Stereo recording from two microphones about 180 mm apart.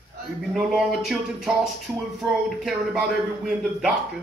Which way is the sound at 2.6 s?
Centre (ahead or behind).